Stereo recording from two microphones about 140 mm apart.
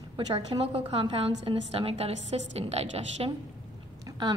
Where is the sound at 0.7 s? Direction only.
45° right (ahead or behind).